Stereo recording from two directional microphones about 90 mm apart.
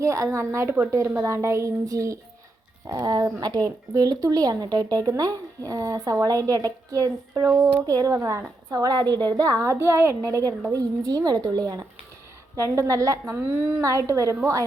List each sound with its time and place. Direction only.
0.0 s speech: 35° right (ahead or behind)
8.7 s speech: 45° right (ahead or behind)
12.5 s speech: 35° right (ahead or behind)
13.8 s speech: 35° right (ahead or behind)